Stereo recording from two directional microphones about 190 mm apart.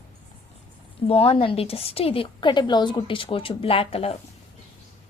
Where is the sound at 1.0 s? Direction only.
30° left (ahead or behind).